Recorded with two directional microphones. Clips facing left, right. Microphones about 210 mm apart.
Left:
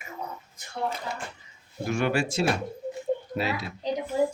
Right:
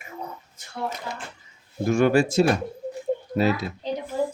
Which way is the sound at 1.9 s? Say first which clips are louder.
Right 7 dB; 45° right (ahead or behind).